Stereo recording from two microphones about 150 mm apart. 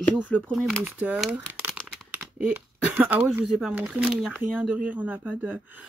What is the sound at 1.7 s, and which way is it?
Crumpling, 5° right (ahead or behind).